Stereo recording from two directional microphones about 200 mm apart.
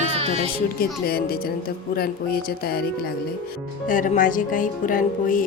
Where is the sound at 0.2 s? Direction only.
30° right (ahead or behind).